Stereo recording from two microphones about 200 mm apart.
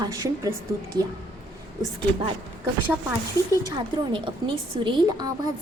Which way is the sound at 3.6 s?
25° right (ahead or behind).